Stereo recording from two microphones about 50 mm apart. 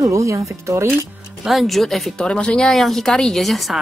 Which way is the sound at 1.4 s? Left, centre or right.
Centre.